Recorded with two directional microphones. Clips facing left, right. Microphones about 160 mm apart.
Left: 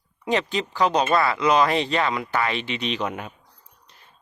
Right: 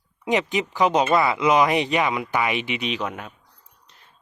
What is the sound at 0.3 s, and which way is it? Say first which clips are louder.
Speech: right 1 dB; 15° right (ahead or behind).